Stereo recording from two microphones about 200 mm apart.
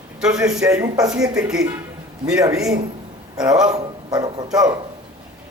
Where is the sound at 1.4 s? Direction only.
5° right (ahead or behind).